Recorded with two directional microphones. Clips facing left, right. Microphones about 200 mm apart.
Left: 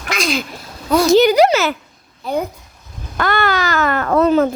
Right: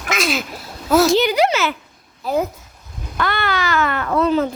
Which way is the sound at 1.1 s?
40° left (ahead or behind).